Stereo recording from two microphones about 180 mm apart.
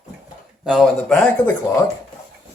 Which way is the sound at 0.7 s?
Centre (ahead or behind).